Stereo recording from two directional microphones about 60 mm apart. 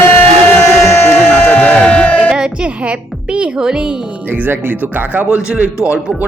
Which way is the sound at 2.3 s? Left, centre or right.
Centre.